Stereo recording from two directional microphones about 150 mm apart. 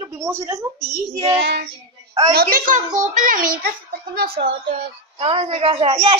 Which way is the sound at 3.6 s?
90° right.